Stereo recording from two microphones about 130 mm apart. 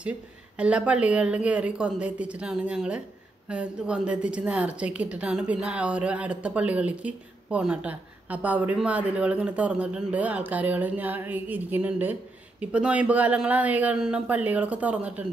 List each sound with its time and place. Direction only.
0.6 s a woman's voice: 10° right (ahead or behind)